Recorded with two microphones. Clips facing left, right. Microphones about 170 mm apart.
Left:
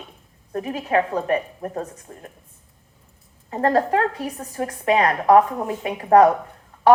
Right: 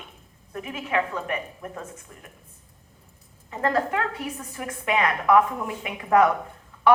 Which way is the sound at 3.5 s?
35° left (ahead or behind).